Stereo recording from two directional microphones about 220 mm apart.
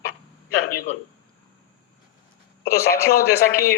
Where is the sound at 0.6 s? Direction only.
40° left (ahead or behind).